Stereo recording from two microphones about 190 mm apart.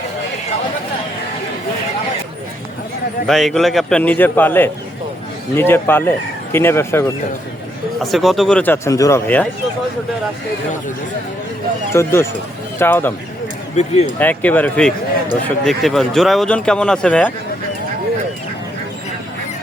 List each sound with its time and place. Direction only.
3.2 s speech: centre (ahead or behind)
8.0 s speech: centre (ahead or behind)
11.9 s speech: 15° left (ahead or behind)
13.8 s speech: 35° left (ahead or behind)
14.2 s speech: 10° left (ahead or behind)